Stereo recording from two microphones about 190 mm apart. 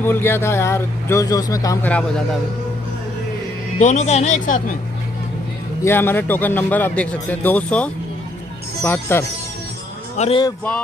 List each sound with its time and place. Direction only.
0.0 s a man's voice: 10° left (ahead or behind)
1.9 s a man's voice: 5° left (ahead or behind)
3.8 s speech: 40° left (ahead or behind)
5.8 s a man's voice: 10° left (ahead or behind)
10.1 s speech: 35° left (ahead or behind)